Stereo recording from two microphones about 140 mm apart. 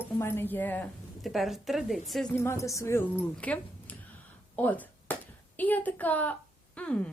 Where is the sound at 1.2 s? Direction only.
Centre (ahead or behind).